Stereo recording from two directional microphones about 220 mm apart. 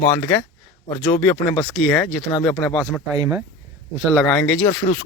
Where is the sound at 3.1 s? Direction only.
15° right (ahead or behind).